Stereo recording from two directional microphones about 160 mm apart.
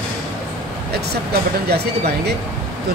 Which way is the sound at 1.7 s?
90° right.